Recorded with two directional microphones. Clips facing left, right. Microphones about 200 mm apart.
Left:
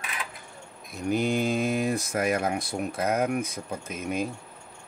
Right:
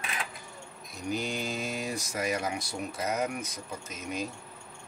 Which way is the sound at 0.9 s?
55° left (ahead or behind).